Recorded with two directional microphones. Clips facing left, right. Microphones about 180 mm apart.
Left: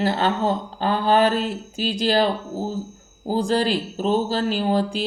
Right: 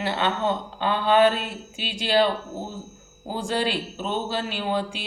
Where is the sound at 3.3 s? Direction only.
35° left (ahead or behind).